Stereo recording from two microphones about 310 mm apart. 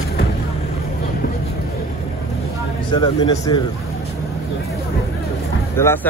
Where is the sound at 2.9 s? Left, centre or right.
Centre.